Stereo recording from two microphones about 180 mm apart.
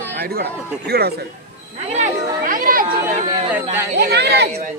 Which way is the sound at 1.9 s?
45° right (ahead or behind).